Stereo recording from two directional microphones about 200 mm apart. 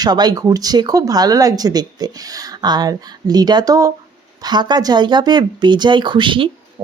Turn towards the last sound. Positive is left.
turn(degrees=-25)  # may be behind; listen again after turning